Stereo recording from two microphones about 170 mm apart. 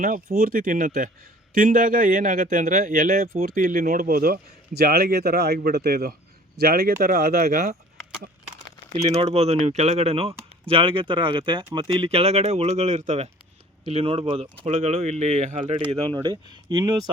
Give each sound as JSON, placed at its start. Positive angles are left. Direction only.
{"t": 0.0, "sound": "speech", "side_deg": -55}
{"t": 8.9, "sound": "speech", "side_deg": -40}
{"t": 13.9, "sound": "speech", "side_deg": -35}
{"t": 15.8, "sound": "speech", "side_deg": -30}